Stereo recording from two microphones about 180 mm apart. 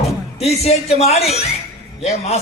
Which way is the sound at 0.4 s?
35° left (ahead or behind).